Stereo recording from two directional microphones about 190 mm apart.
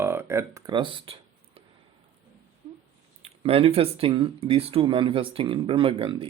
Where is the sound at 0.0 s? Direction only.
10° right (ahead or behind); by 1.6 s 30° right (ahead or behind).